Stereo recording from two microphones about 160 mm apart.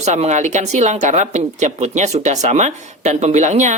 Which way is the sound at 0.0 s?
45° right (ahead or behind).